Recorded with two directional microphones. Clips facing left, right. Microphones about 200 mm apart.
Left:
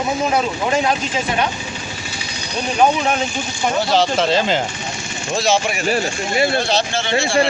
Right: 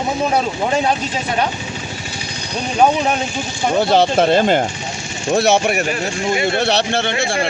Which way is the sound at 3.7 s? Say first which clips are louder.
Right 4 dB; 55° right (ahead or behind).